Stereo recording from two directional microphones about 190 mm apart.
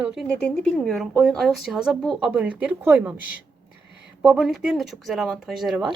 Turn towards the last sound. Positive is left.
turn(degrees=0)  # may be behind; listen again after turning